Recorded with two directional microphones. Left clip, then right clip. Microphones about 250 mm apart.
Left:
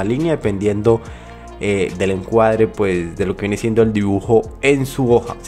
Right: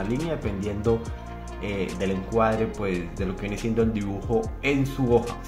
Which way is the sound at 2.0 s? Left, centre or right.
Left.